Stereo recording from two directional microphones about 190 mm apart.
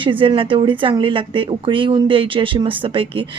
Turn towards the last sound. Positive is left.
turn(degrees=-25)  # may be behind; listen again after turning